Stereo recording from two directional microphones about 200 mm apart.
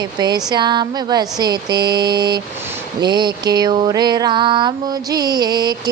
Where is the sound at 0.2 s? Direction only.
20° right (ahead or behind).